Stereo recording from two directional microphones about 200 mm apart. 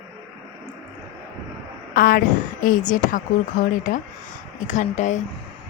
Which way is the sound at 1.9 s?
45° left (ahead or behind).